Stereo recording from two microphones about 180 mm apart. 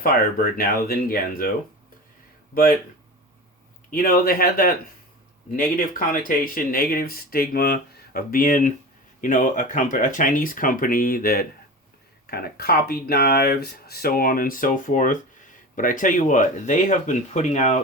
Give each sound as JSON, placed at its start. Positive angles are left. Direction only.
{"t": 0.0, "sound": "speech", "side_deg": 50}
{"t": 3.9, "sound": "speech", "side_deg": 55}